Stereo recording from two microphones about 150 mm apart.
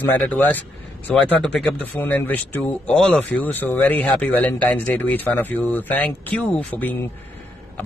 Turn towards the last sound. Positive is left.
turn(degrees=10)  # may be behind; listen again after turning